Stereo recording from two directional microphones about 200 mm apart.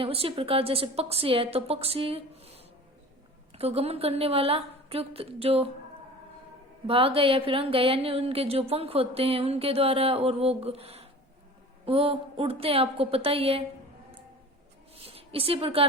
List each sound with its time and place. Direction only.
0.0 s speech: 30° right (ahead or behind)
3.5 s speech: 30° right (ahead or behind)
6.8 s speech: 30° right (ahead or behind)
14.9 s a woman's voice: 30° right (ahead or behind)